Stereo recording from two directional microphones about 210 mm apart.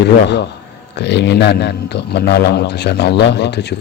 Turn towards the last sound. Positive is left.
turn(degrees=55)  # may be behind; listen again after turning